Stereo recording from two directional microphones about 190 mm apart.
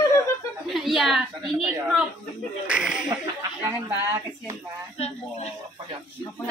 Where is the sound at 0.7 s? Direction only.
Centre (ahead or behind).